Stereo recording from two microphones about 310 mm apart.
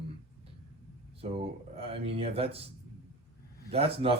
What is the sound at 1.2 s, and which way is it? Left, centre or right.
Speech, centre.